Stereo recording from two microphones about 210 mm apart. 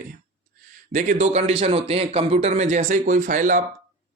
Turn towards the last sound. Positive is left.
turn(degrees=-40)  # may be behind; listen again after turning